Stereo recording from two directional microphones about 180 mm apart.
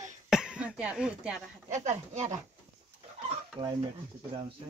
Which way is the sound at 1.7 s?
40° right (ahead or behind).